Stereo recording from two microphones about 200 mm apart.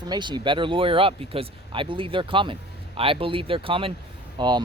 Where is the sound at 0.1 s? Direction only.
20° right (ahead or behind).